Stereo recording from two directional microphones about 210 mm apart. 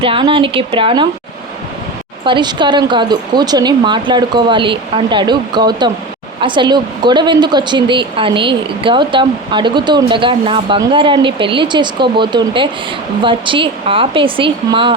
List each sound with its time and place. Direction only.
0.0 s a woman's voice: 25° right (ahead or behind)
2.2 s a woman's voice: 20° right (ahead or behind)